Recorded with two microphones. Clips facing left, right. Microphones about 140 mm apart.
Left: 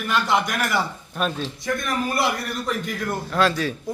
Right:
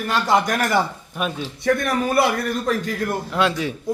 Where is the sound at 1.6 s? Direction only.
65° right (ahead or behind).